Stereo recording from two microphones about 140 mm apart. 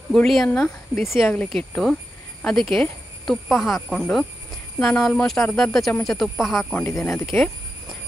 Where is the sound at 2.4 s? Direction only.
Centre (ahead or behind).